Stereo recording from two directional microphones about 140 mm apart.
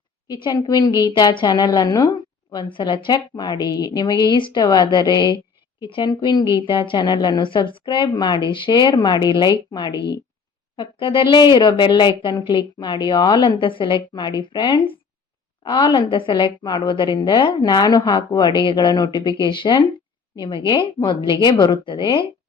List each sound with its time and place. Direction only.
0.3 s a woman's voice: 30° left (ahead or behind)